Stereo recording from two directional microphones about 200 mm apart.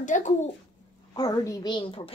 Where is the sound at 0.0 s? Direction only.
40° left (ahead or behind).